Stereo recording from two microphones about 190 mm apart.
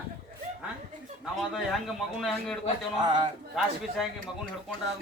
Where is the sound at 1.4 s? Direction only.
Centre (ahead or behind).